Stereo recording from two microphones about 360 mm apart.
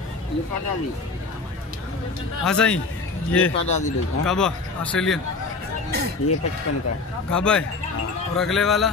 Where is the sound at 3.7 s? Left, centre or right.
Centre.